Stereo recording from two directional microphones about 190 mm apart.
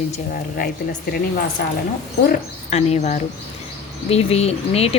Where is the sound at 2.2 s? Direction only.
40° left (ahead or behind).